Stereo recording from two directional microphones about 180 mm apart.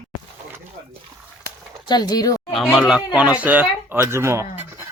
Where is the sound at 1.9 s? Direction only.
20° left (ahead or behind).